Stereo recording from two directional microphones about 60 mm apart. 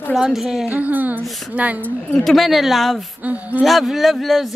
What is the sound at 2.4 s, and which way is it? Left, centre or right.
Speech, centre.